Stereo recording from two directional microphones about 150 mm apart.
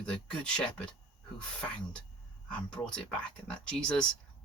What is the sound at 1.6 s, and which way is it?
Speech, 5° left (ahead or behind).